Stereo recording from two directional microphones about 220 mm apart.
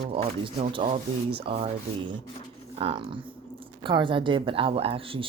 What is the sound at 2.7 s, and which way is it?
Speech, 25° right (ahead or behind).